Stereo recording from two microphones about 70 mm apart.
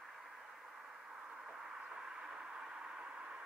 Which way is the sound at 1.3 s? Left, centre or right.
Centre.